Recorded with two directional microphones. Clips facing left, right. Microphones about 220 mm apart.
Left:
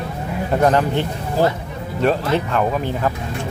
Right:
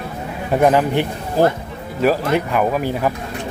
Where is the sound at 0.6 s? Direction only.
15° right (ahead or behind).